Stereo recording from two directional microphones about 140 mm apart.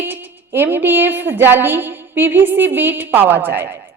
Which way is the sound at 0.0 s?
15° right (ahead or behind).